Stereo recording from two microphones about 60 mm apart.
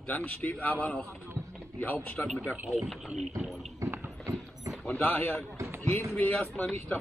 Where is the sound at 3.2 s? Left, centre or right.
Centre.